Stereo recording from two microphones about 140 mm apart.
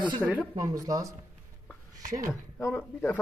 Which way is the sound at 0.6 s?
25° right (ahead or behind).